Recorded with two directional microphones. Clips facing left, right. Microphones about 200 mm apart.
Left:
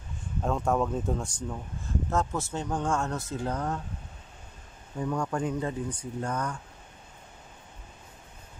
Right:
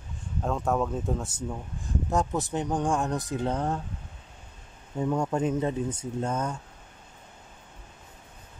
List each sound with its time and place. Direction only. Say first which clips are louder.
0.4 s speech: even; centre (ahead or behind)
2.0 s speech: right 3 dB; 15° right (ahead or behind)
4.9 s speech: right 3 dB; 25° right (ahead or behind)